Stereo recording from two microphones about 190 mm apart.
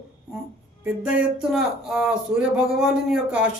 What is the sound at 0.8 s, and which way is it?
Speech, 5° right (ahead or behind).